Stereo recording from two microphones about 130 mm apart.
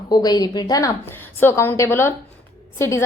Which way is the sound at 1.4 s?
15° left (ahead or behind).